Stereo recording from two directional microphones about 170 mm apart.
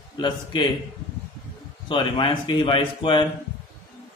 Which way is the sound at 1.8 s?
30° left (ahead or behind).